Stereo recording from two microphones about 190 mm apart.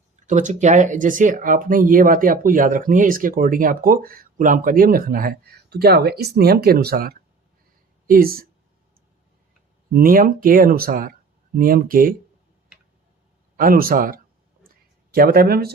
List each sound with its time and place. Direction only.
0.3 s speech: 40° right (ahead or behind)
9.9 s speech: 50° right (ahead or behind)
13.6 s speech: 50° right (ahead or behind)